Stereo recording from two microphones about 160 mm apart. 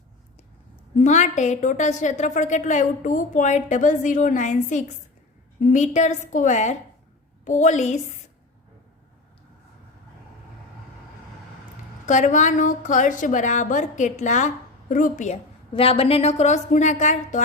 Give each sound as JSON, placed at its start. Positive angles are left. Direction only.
{"t": 0.9, "sound": "a woman's voice", "side_deg": 45}
{"t": 12.0, "sound": "a woman's voice", "side_deg": 50}
{"t": 15.7, "sound": "a woman's voice", "side_deg": 35}